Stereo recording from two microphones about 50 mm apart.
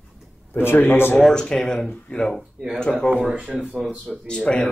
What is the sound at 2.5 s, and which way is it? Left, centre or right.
Speech, centre.